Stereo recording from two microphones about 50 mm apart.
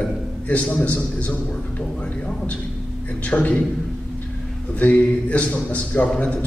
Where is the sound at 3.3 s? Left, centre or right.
Left.